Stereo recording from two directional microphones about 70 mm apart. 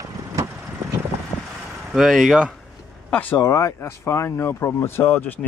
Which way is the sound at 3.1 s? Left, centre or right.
Left.